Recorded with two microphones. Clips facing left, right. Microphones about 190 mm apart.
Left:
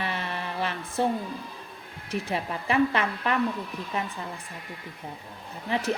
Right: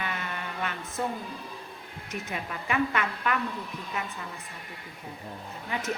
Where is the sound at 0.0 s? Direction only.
30° left (ahead or behind).